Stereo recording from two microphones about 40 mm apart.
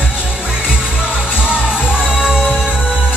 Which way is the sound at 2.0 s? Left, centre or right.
Centre.